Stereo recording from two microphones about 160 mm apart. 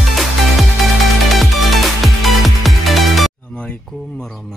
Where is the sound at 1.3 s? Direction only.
Centre (ahead or behind).